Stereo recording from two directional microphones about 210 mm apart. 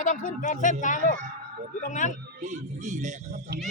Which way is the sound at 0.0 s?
40° left (ahead or behind).